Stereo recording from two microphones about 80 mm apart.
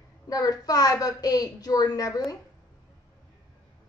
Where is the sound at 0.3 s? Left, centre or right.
Left.